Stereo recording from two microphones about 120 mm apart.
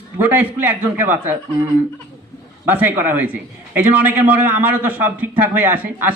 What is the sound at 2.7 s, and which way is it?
A man's voice, 15° right (ahead or behind).